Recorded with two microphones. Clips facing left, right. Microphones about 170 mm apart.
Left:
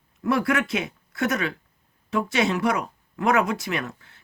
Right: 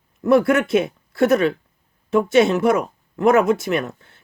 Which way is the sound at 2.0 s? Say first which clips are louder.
Right 8 dB; 50° right (ahead or behind).